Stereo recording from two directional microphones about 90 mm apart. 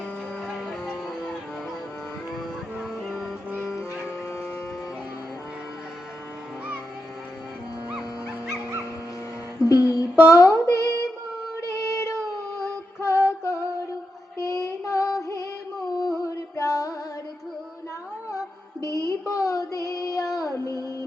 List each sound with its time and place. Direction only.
0.4 s music: centre (ahead or behind)
3.0 s music: centre (ahead or behind)
9.6 s music: 40° left (ahead or behind)
11.5 s a sound: 35° left (ahead or behind)
14.3 s music: 35° left (ahead or behind)
18.3 s music: 35° left (ahead or behind)